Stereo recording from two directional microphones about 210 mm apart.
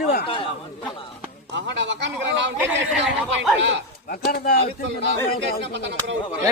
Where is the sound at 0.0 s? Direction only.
50° left (ahead or behind).